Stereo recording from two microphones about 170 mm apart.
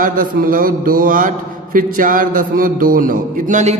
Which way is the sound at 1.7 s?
55° right (ahead or behind).